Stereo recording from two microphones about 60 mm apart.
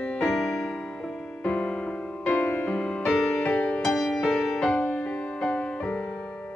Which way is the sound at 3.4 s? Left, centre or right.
Centre.